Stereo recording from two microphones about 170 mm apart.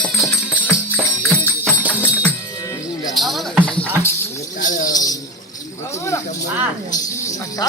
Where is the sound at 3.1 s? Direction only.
Centre (ahead or behind).